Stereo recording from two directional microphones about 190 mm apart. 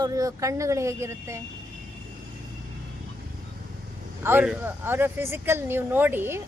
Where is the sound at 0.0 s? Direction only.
20° right (ahead or behind).